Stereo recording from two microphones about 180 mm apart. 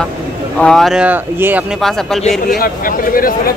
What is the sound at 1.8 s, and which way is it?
Speech, centre (ahead or behind).